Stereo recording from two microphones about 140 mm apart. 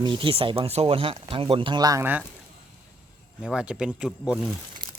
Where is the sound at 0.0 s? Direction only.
35° right (ahead or behind).